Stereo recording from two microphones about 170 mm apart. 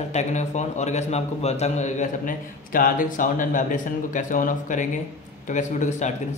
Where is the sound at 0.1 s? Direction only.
45° left (ahead or behind).